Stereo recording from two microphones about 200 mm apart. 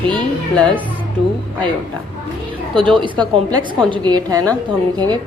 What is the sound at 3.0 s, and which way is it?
A woman's voice, 20° right (ahead or behind).